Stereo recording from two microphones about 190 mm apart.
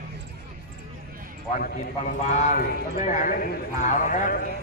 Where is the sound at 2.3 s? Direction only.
40° left (ahead or behind).